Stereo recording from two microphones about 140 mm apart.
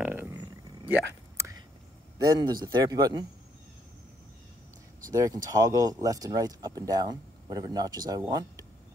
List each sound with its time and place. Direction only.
0.0 s a sound: 10° right (ahead or behind)
2.1 s speech: 30° right (ahead or behind)
5.1 s speech: 25° right (ahead or behind)